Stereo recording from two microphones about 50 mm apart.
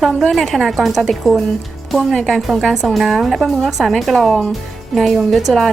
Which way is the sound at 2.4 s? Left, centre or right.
Centre.